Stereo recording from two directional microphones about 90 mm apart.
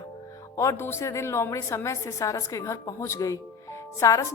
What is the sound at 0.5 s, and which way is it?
A woman's voice, 30° left (ahead or behind).